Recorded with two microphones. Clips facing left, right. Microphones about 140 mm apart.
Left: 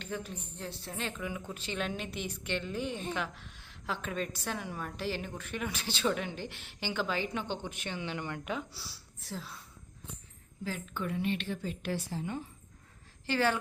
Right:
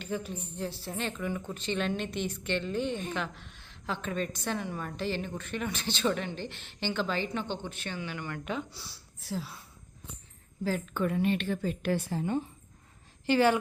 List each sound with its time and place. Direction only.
0.0 s a woman's voice: centre (ahead or behind); by 8.4 s 25° left (ahead or behind)
8.4 s a woman's voice: 5° left (ahead or behind)
10.6 s a woman's voice: 40° right (ahead or behind)
13.2 s speech: 15° right (ahead or behind)